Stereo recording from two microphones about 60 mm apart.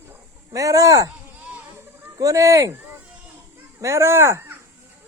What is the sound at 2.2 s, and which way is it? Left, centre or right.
Speech, right.